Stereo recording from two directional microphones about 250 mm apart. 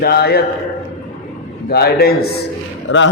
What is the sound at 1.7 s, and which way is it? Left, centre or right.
Speech, left.